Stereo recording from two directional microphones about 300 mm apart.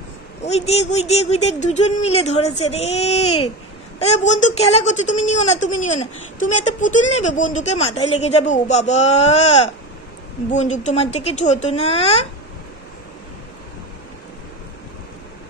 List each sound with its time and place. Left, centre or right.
0.4 s speech: left